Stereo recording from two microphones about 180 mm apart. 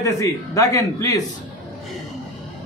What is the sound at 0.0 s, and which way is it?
A man's voice, 15° left (ahead or behind).